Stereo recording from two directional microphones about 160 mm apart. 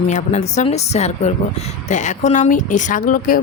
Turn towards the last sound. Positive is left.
turn(degrees=55)  # may be behind; listen again after turning